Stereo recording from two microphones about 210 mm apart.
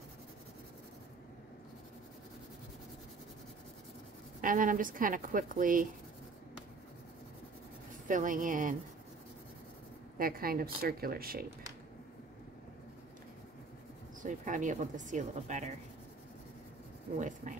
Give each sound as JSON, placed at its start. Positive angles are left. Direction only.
{"t": 4.4, "sound": "speech", "side_deg": -40}
{"t": 8.1, "sound": "speech", "side_deg": -40}
{"t": 10.1, "sound": "speech", "side_deg": -45}
{"t": 14.2, "sound": "speech", "side_deg": -35}